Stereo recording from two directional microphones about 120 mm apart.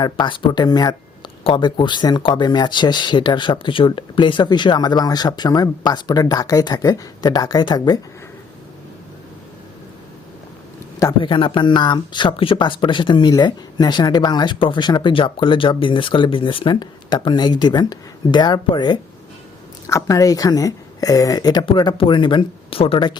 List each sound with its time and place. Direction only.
0.0 s speech: 40° left (ahead or behind)
1.5 s speech: 45° left (ahead or behind)
11.2 s speech: 45° left (ahead or behind)
19.9 s speech: 25° left (ahead or behind)
21.7 s speech: 45° left (ahead or behind)